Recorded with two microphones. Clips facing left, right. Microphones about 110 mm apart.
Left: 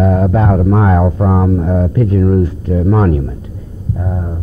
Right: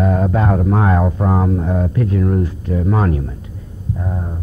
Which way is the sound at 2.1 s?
45° left (ahead or behind).